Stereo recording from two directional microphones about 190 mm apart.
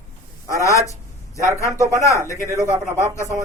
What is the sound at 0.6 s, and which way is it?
A man's voice, 15° left (ahead or behind).